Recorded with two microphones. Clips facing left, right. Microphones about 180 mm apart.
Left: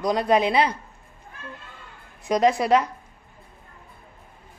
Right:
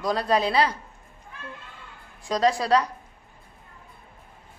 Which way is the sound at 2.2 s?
20° left (ahead or behind).